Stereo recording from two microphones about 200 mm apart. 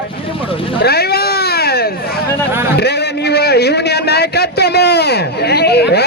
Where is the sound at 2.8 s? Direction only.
55° left (ahead or behind).